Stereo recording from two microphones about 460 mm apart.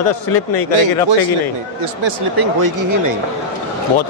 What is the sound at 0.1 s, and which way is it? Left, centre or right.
Speech, left.